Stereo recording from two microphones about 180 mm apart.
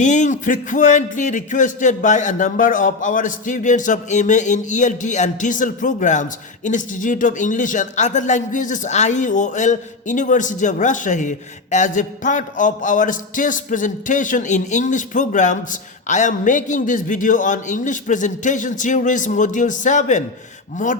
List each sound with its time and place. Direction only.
0.0 s speech: 45° left (ahead or behind)